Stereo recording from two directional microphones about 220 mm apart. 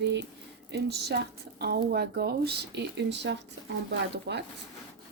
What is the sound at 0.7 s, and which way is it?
Speech, 50° right (ahead or behind).